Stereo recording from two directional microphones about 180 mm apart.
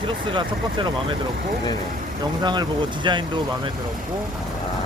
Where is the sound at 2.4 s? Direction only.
25° right (ahead or behind).